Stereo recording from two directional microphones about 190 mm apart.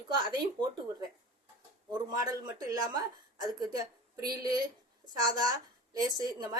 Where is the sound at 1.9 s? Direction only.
20° right (ahead or behind).